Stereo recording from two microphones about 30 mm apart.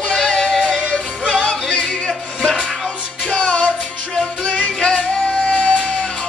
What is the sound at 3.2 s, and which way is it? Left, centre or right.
Music, left.